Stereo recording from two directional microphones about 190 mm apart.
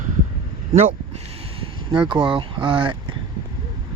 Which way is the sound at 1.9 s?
25° right (ahead or behind).